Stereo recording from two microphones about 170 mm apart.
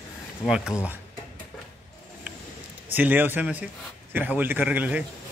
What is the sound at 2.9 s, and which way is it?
A man's voice, 10° right (ahead or behind).